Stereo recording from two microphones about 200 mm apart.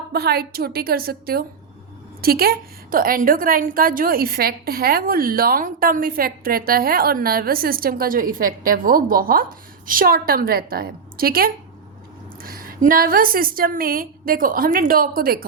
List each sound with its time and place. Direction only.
0.1 s a woman's voice: 50° right (ahead or behind)